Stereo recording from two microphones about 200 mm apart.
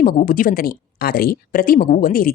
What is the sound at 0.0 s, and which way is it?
Speech, 45° left (ahead or behind).